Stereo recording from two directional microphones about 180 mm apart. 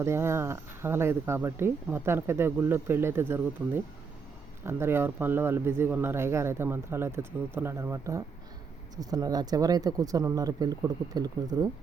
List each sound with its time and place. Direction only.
0.0 s speech: 15° right (ahead or behind)